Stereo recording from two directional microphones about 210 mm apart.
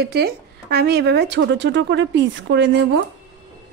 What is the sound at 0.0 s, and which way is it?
Speech, 50° right (ahead or behind).